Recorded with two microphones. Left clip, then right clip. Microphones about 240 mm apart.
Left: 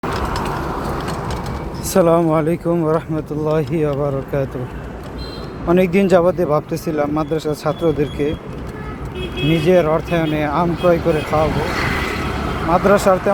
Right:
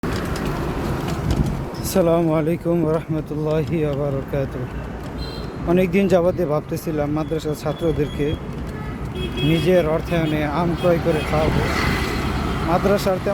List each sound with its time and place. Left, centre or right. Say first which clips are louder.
1.9 s speech: left 4 dB; centre
5.6 s speech: left 4 dB; centre
9.5 s speech: left 4 dB; centre
11.8 s vehicle: left 2 dB; right
12.7 s speech: left 6 dB; centre